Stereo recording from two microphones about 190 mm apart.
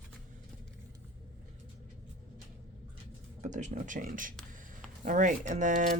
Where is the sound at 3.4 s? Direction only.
40° right (ahead or behind).